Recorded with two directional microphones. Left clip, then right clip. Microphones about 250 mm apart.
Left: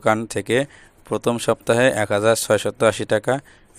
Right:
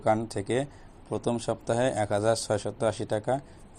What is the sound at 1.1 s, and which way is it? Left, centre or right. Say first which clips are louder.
Speech: left 9 dB; left.